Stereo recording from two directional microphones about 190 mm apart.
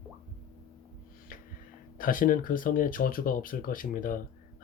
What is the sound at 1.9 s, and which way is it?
Speech, 45° left (ahead or behind).